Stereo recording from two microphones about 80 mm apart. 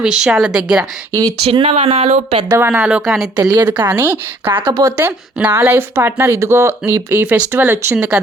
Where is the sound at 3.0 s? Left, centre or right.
Centre.